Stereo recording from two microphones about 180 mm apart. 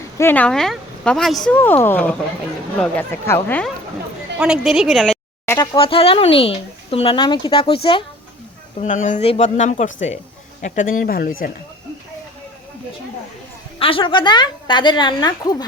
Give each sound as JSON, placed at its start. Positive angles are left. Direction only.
{"t": 0.2, "sound": "speech", "side_deg": 10}
{"t": 4.4, "sound": "a woman's voice", "side_deg": -5}
{"t": 5.7, "sound": "speech", "side_deg": 30}
{"t": 8.8, "sound": "speech", "side_deg": 45}
{"t": 13.7, "sound": "a woman's voice", "side_deg": 30}